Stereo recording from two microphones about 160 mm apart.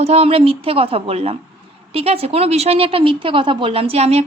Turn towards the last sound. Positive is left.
turn(degrees=-40)  # may be behind; listen again after turning